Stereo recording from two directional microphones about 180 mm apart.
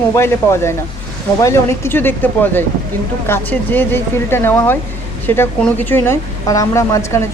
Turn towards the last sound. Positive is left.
turn(degrees=15)  # may be behind; listen again after turning